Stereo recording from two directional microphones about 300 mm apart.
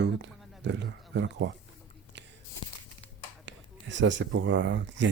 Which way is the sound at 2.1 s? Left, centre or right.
Right.